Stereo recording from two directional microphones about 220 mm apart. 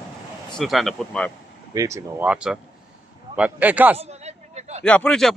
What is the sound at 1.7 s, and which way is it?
Speech, 15° right (ahead or behind).